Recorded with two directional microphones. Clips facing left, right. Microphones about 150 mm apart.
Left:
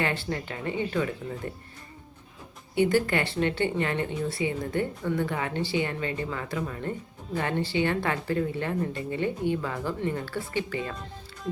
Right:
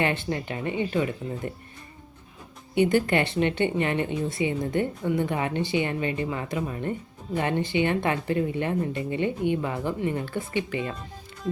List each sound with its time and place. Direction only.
0.0 s a woman's voice: 20° right (ahead or behind)
2.7 s a woman's voice: 20° right (ahead or behind)